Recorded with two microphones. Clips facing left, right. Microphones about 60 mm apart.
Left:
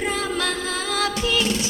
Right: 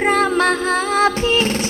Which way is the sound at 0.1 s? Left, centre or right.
Right.